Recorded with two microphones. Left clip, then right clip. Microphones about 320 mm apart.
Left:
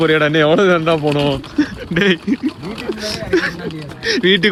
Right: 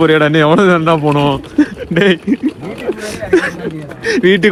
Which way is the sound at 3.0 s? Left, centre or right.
Centre.